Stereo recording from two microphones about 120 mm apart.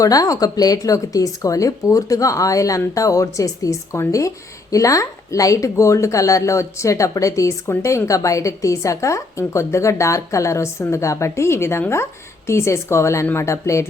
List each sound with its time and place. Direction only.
0.0 s speech: 30° left (ahead or behind)